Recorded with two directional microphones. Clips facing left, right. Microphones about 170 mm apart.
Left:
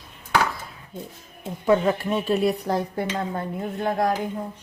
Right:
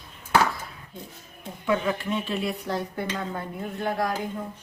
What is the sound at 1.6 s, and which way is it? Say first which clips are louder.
Speech: left 5 dB; 40° left (ahead or behind).